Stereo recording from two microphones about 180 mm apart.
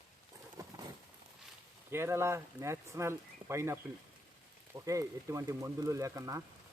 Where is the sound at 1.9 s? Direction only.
15° right (ahead or behind).